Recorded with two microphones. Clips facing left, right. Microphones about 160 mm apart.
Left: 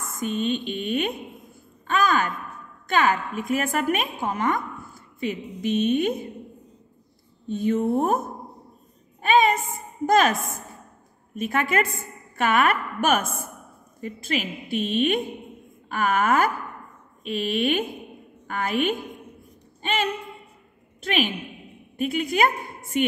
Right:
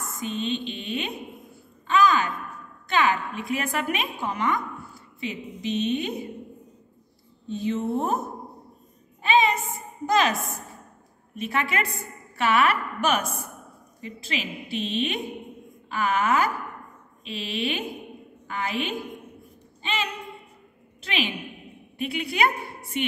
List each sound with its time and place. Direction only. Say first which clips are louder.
0.0 s a woman's voice: left 4 dB; 50° left (ahead or behind)
7.4 s a woman's voice: left 4 dB; 50° left (ahead or behind)
9.2 s a sound: left 2 dB; 50° left (ahead or behind)
11.3 s a woman's voice: left 4 dB; 50° left (ahead or behind)